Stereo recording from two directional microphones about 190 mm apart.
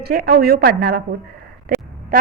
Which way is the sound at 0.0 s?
55° right (ahead or behind).